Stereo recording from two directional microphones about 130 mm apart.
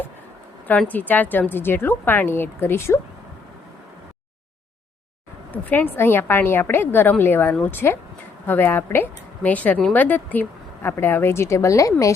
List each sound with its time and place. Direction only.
0.7 s a woman's voice: 10° left (ahead or behind)
5.5 s a woman's voice: 15° left (ahead or behind)